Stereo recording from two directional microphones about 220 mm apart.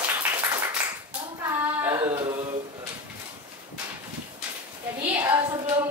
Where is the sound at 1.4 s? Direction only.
10° right (ahead or behind).